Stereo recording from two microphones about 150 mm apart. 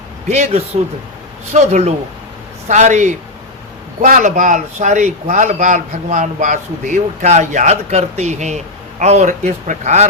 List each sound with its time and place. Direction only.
0.3 s a man's voice: 50° right (ahead or behind)